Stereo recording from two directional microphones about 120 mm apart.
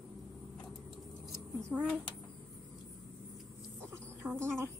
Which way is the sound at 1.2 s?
10° right (ahead or behind).